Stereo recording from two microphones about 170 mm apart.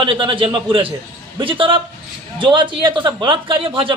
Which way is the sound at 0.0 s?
30° right (ahead or behind).